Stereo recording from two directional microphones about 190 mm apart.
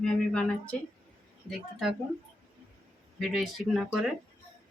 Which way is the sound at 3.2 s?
Centre (ahead or behind).